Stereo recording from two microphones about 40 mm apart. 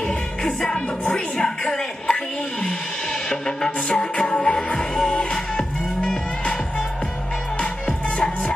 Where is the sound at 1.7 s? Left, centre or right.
Left.